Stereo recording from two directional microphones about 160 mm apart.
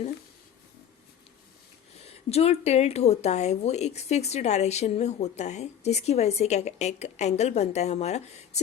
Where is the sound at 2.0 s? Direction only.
40° left (ahead or behind).